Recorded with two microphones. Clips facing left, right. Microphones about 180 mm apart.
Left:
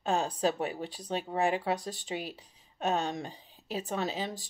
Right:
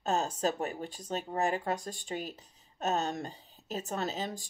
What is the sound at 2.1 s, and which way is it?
Speech, 40° right (ahead or behind).